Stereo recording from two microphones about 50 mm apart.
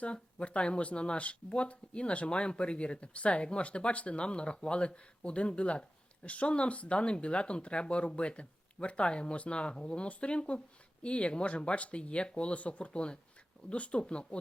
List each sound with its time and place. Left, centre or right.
0.0 s speech: left